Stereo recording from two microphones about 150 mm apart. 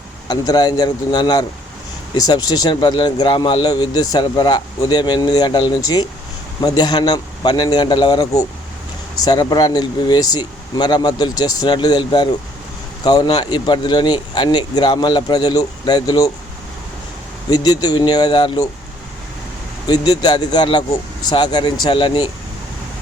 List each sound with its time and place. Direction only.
0.3 s speech: 25° left (ahead or behind)
17.5 s speech: 25° left (ahead or behind)
19.9 s speech: 25° left (ahead or behind)